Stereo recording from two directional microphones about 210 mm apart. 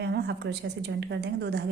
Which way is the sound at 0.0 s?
50° right (ahead or behind).